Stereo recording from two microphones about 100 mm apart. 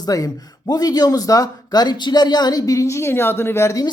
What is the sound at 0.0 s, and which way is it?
Speech, 35° left (ahead or behind).